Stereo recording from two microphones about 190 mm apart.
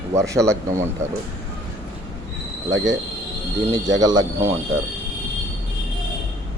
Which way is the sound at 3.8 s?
20° right (ahead or behind).